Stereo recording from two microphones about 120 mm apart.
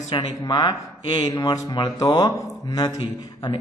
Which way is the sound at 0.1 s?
35° left (ahead or behind).